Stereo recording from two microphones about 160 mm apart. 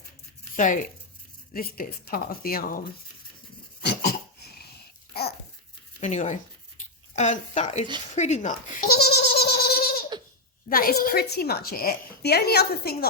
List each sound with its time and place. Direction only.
0.5 s a woman's voice: 55° left (ahead or behind)
6.0 s speech: 50° left (ahead or behind)
8.9 s goat: 80° left
10.7 s a woman's voice: 65° left (ahead or behind)